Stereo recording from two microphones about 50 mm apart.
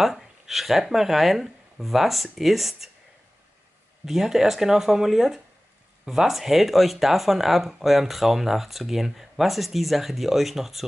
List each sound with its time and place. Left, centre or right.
0.0 s speech: centre
4.0 s speech: centre